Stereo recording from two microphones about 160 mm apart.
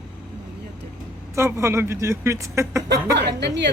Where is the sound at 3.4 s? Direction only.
90° right.